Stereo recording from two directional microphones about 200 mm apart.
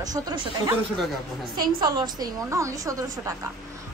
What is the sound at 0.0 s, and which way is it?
Speech, 20° right (ahead or behind).